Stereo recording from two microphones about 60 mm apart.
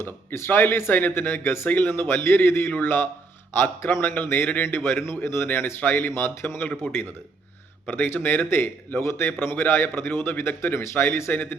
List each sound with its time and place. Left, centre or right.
0.0 s a man's voice: left
5.5 s speech: left
6.1 s a man's voice: left
7.9 s a man's voice: left
11.3 s speech: left